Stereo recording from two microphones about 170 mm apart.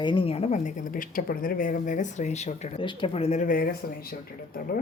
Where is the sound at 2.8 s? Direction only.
30° left (ahead or behind); by 4.8 s 60° left (ahead or behind).